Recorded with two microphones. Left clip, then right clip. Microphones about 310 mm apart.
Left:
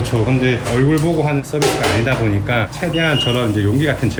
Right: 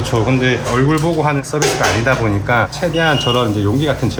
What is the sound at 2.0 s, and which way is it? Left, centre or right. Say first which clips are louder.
Speech: right 3 dB; right.